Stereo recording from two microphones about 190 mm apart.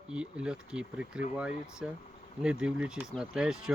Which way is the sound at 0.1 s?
5° right (ahead or behind).